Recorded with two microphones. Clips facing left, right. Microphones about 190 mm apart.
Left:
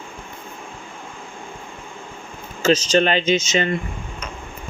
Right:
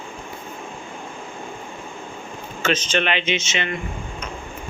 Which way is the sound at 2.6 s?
35° left (ahead or behind).